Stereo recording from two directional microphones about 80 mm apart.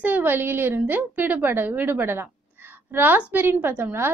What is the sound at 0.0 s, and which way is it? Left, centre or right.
A woman's voice, right.